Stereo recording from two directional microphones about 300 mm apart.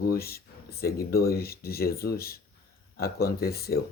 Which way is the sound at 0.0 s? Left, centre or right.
Left.